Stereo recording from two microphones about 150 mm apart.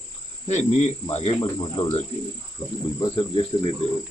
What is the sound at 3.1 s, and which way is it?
Speech, 35° left (ahead or behind).